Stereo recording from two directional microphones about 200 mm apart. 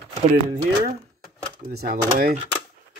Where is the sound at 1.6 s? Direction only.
50° right (ahead or behind).